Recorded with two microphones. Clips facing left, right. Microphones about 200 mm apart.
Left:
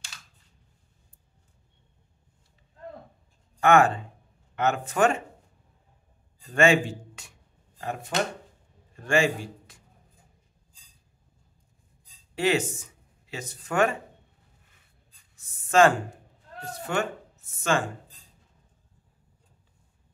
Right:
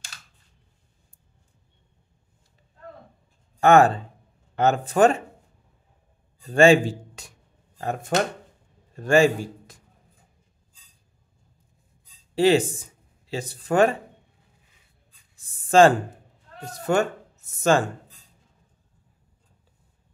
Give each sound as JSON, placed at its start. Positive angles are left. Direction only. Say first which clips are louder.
{"t": 3.6, "sound": "speech", "louder": "right 4 dB", "side_deg": -35}
{"t": 6.4, "sound": "a man's voice", "louder": "right 6 dB", "side_deg": -35}
{"t": 12.4, "sound": "speech", "louder": "right 6 dB", "side_deg": -35}
{"t": 15.3, "sound": "a sound", "louder": "right 4 dB", "side_deg": -30}
{"t": 16.9, "sound": "speech", "louder": "right 7 dB", "side_deg": -40}